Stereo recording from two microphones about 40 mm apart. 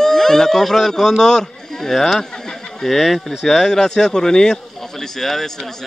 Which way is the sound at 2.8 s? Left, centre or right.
Centre.